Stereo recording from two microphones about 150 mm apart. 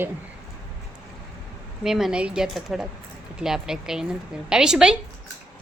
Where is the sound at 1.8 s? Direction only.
Centre (ahead or behind).